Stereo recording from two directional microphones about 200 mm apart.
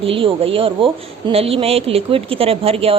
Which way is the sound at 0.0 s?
25° right (ahead or behind).